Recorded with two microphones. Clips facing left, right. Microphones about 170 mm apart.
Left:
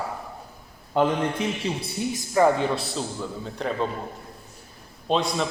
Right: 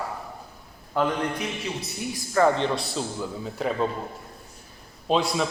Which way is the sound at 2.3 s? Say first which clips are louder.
Left 1 dB; 10° left (ahead or behind).